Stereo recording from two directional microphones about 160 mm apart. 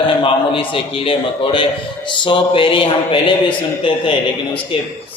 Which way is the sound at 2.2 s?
30° left (ahead or behind).